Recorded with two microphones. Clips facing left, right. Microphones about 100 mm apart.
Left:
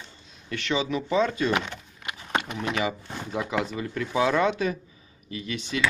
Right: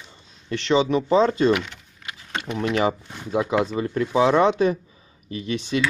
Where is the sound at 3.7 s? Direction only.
30° right (ahead or behind).